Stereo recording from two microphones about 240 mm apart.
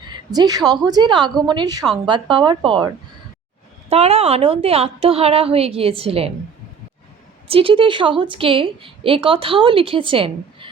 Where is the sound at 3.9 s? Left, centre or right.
Right.